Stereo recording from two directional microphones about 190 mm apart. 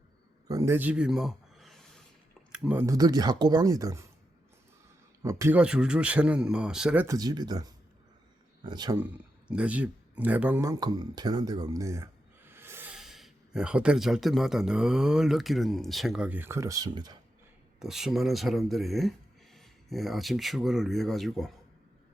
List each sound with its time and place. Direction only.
0.4 s a sound: 15° right (ahead or behind); by 1.8 s centre (ahead or behind)
2.5 s speech: 5° right (ahead or behind)
5.2 s speech: 15° right (ahead or behind)
9.5 s speech: 5° right (ahead or behind); by 17.2 s 20° right (ahead or behind)
17.7 s speech: centre (ahead or behind)